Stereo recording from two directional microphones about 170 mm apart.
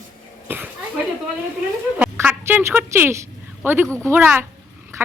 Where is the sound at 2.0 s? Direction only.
10° right (ahead or behind).